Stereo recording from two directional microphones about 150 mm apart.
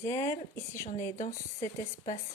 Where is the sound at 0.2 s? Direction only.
20° left (ahead or behind).